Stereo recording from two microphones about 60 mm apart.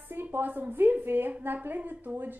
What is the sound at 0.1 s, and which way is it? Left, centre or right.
A woman's voice, right.